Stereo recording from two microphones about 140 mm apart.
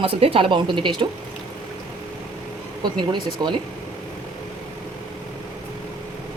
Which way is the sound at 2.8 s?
30° right (ahead or behind).